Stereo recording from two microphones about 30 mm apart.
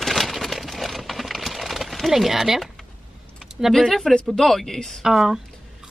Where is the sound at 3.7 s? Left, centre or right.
Centre.